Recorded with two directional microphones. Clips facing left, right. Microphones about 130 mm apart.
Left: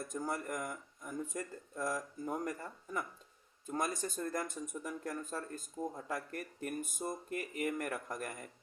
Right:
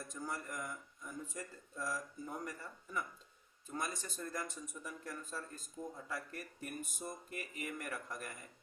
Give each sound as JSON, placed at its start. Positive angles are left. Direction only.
{"t": 0.1, "sound": "speech", "side_deg": 45}